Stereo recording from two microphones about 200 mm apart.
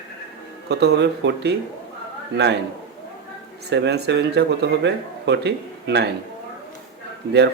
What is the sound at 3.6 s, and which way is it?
Speech, 60° right (ahead or behind).